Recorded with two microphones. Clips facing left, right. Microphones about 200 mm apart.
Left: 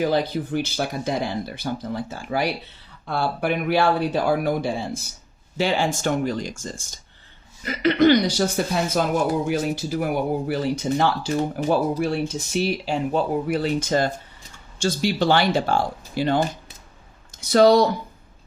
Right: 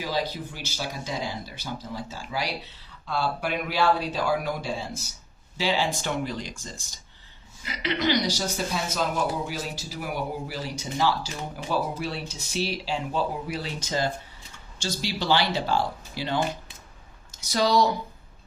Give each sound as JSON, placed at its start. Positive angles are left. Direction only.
{"t": 0.0, "sound": "speech", "side_deg": 55}